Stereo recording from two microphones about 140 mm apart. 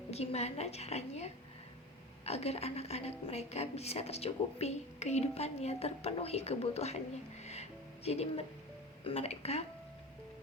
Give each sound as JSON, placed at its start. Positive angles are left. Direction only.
{"t": 0.1, "sound": "a woman's voice", "side_deg": 50}
{"t": 7.4, "sound": "music", "side_deg": 50}
{"t": 9.0, "sound": "a woman's voice", "side_deg": 45}